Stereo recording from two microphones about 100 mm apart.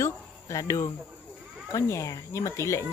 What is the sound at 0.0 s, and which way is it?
Cricket, 30° left (ahead or behind).